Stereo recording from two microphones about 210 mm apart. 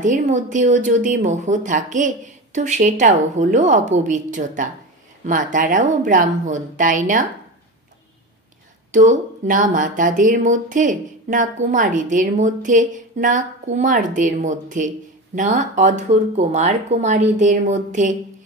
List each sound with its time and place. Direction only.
0.0 s speech: 35° right (ahead or behind)
8.9 s speech: 35° right (ahead or behind)